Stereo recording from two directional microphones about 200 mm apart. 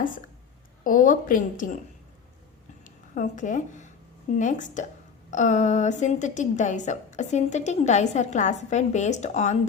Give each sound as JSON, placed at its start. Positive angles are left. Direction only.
{"t": 0.9, "sound": "a woman's voice", "side_deg": 40}
{"t": 2.8, "sound": "a woman's voice", "side_deg": 40}